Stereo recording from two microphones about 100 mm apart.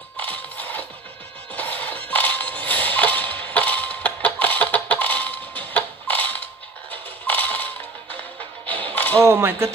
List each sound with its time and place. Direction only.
0.2 s a sound: 15° left (ahead or behind)
6.9 s music: 15° left (ahead or behind)
9.2 s speech: 25° right (ahead or behind)